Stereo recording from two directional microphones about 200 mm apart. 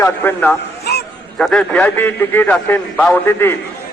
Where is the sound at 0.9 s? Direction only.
50° left (ahead or behind).